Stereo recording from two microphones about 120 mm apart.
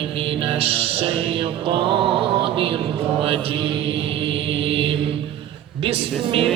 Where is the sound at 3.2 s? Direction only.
50° right (ahead or behind).